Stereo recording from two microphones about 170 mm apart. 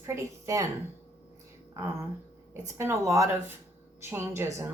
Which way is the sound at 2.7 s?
15° right (ahead or behind).